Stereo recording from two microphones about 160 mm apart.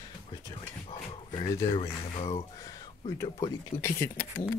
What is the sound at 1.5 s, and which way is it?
Speech, 25° left (ahead or behind).